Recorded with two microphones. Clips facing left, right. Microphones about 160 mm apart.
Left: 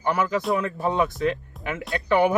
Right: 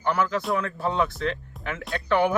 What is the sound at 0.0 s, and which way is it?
Speech, 5° left (ahead or behind).